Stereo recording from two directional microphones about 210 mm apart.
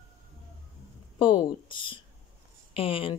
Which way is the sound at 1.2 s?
25° left (ahead or behind).